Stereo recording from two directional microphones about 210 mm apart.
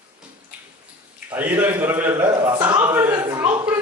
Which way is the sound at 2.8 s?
10° right (ahead or behind).